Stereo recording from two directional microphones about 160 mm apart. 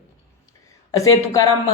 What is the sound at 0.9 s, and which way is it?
Speech, 20° left (ahead or behind).